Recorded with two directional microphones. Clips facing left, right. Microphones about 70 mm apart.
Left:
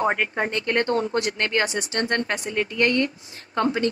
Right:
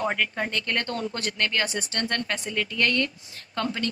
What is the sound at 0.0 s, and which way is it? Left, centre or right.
Speech, left.